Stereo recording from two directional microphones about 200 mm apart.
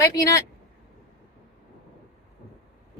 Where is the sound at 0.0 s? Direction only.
15° left (ahead or behind).